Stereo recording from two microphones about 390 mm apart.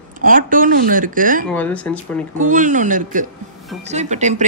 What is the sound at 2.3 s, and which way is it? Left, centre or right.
A woman's voice, centre.